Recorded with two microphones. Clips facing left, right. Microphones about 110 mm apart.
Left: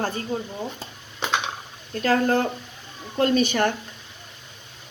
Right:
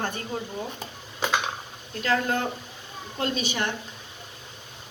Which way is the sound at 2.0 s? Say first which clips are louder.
Left 5 dB; 40° left (ahead or behind).